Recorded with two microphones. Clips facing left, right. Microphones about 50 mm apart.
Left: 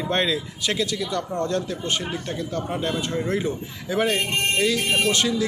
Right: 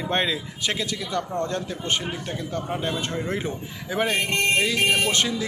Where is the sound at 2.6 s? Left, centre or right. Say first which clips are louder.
Even; centre.